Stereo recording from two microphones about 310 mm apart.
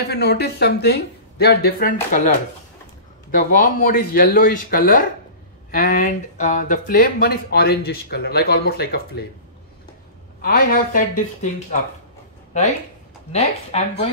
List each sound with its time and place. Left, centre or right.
0.1 s speech: left
10.4 s speech: left
13.3 s speech: centre